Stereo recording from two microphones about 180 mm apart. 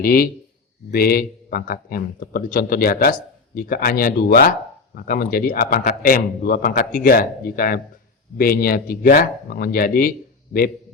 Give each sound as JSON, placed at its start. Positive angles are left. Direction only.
{"t": 0.0, "sound": "a man's voice", "side_deg": 55}